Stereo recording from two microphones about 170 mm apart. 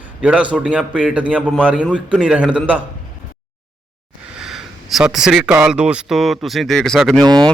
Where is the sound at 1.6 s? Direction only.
5° right (ahead or behind).